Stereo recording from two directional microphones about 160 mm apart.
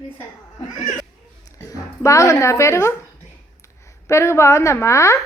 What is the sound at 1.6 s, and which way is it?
Speech, 20° left (ahead or behind).